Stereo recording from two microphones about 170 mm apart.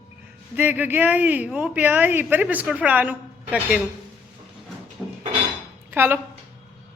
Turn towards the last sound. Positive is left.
turn(degrees=-10)  # may be behind; listen again after turning